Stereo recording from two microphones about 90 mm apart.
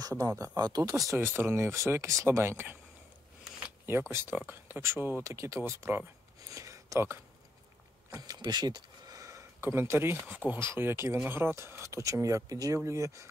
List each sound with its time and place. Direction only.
0.1 s speech: 35° right (ahead or behind)
0.6 s speech: 50° right (ahead or behind)
0.8 s speech: 35° right (ahead or behind)
3.8 s speech: 25° right (ahead or behind)
6.5 s a sound: 35° right (ahead or behind)
8.1 s a sound: 45° right (ahead or behind)
9.6 s speech: 30° right (ahead or behind)